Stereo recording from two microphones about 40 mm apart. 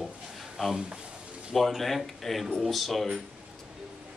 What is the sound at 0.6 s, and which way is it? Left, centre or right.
Speech, centre.